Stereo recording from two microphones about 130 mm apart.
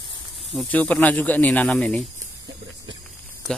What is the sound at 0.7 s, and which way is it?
Speech, 10° left (ahead or behind).